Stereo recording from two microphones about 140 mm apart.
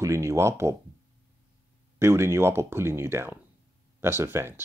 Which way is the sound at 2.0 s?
20° right (ahead or behind).